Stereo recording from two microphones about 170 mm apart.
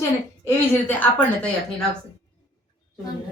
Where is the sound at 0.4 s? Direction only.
10° left (ahead or behind).